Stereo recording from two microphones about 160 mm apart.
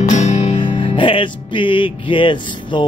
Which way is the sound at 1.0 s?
30° left (ahead or behind).